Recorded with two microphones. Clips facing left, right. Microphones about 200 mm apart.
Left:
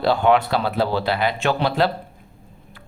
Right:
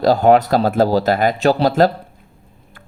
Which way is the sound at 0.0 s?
40° right (ahead or behind).